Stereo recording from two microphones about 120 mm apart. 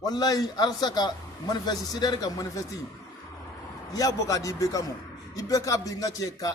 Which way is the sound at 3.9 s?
30° left (ahead or behind).